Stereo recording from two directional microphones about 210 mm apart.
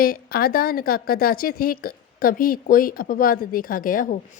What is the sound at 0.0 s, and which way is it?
A woman's voice, 45° left (ahead or behind).